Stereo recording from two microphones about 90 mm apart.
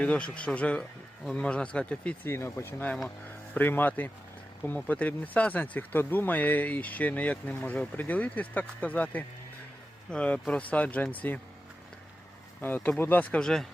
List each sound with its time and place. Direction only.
0.0 s speech: 10° left (ahead or behind)
2.2 s speech: 30° left (ahead or behind)
12.6 s speech: 20° left (ahead or behind)
13.4 s speech: 5° left (ahead or behind)